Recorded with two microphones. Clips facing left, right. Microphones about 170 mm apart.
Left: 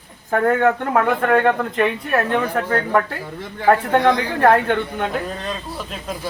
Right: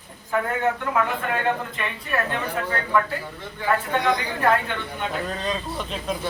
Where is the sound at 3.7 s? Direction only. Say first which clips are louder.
Left 7 dB; 55° left (ahead or behind).